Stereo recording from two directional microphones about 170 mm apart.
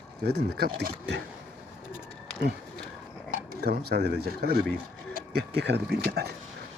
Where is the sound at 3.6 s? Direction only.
70° right (ahead or behind).